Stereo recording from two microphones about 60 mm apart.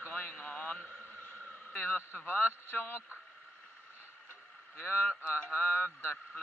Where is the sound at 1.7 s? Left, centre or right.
Left.